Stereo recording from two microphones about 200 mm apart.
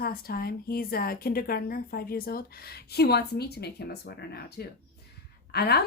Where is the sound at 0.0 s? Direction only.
50° left (ahead or behind).